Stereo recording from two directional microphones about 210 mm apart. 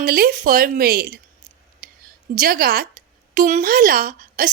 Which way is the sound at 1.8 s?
40° right (ahead or behind).